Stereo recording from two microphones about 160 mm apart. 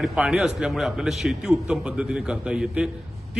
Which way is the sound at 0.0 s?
5° right (ahead or behind).